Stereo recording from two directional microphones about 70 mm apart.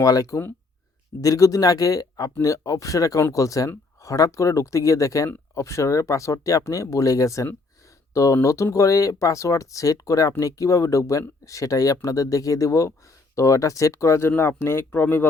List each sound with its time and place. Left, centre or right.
0.0 s speech: left